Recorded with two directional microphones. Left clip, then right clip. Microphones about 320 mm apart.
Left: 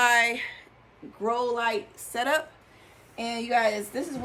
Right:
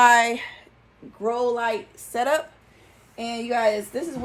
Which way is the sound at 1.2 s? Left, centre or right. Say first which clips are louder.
Right 3 dB; centre.